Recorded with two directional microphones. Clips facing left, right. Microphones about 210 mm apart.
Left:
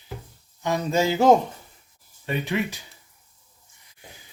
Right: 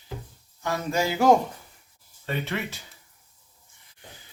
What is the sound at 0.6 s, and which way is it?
Speech, 20° left (ahead or behind).